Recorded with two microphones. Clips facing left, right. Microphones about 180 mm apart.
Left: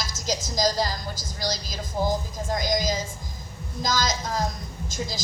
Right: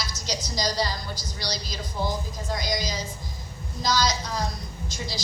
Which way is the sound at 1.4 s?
45° left (ahead or behind).